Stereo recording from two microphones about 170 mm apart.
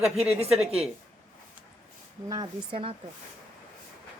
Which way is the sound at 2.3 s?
25° right (ahead or behind).